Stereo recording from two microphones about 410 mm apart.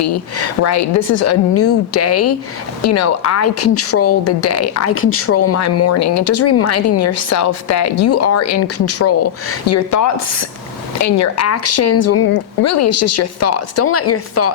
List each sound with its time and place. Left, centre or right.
0.0 s speech: left